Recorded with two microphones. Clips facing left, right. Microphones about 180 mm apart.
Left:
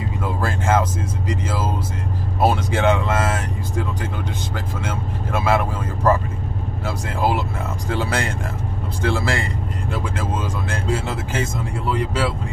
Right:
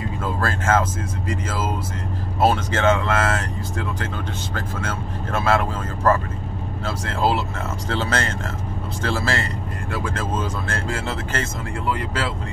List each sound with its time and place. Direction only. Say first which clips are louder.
0.2 s speech: left 1 dB; 15° left (ahead or behind)
2.4 s speech: even; 15° left (ahead or behind)
4.6 s speech: right 1 dB; 15° left (ahead or behind)